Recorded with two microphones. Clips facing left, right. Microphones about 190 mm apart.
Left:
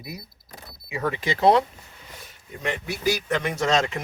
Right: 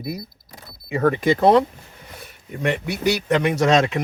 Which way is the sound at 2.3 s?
65° right (ahead or behind).